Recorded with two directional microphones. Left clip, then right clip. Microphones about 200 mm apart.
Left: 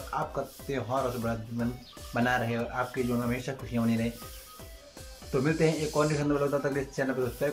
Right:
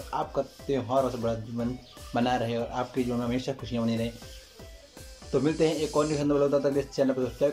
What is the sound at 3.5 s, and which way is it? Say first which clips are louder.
Speech: right 4 dB; 20° right (ahead or behind).